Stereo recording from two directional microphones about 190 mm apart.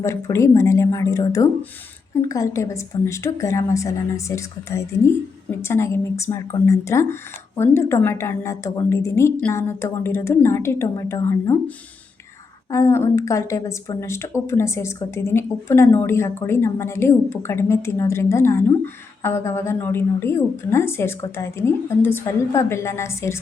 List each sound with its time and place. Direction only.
0.0 s a woman's voice: 15° left (ahead or behind)
12.7 s a woman's voice: 15° left (ahead or behind)